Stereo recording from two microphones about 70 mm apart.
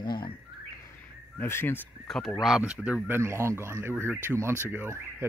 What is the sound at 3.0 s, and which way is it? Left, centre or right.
A man's voice, right.